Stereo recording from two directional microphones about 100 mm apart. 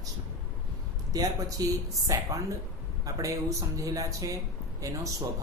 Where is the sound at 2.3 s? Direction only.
30° right (ahead or behind).